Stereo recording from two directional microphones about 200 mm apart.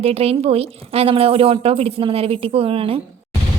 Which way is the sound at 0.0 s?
30° right (ahead or behind).